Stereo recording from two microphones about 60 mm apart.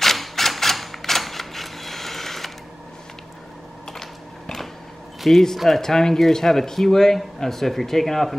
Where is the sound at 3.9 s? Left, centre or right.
Centre.